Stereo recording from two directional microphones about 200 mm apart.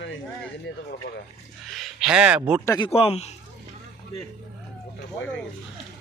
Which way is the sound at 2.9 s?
30° left (ahead or behind).